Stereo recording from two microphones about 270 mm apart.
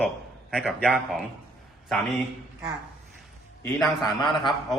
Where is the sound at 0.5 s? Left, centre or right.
Centre.